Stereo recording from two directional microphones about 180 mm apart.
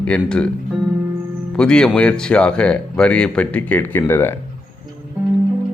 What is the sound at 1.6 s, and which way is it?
Speech, 5° left (ahead or behind).